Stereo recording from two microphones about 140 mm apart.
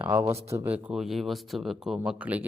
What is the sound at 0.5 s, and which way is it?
Speech, 15° right (ahead or behind).